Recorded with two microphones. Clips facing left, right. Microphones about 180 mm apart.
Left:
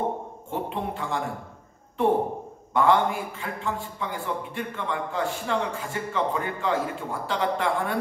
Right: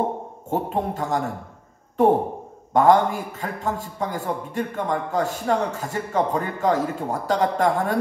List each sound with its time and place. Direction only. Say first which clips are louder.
0.5 s a man's voice: right 6 dB; 40° right (ahead or behind)